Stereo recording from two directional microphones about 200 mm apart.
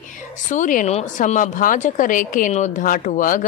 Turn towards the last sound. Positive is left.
turn(degrees=40)  # may be behind; listen again after turning